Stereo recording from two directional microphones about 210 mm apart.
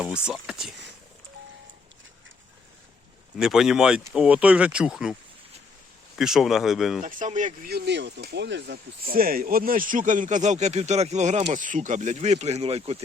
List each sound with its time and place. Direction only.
0.0 s speech: 5° right (ahead or behind)
3.3 s speech: centre (ahead or behind)
6.1 s speech: centre (ahead or behind)
7.0 s speech: 35° right (ahead or behind)